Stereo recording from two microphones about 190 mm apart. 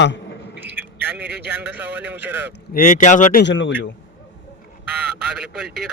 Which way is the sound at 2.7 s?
45° left (ahead or behind).